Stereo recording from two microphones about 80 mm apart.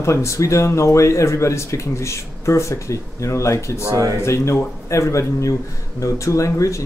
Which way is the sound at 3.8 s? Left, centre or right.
Right.